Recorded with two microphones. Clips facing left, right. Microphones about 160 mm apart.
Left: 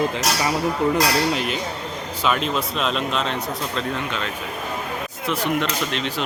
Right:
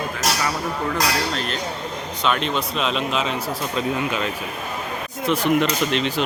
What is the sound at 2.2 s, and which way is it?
A man's voice, centre (ahead or behind).